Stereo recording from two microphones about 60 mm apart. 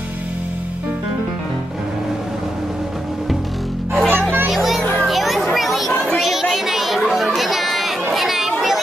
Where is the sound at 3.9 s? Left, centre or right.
Right.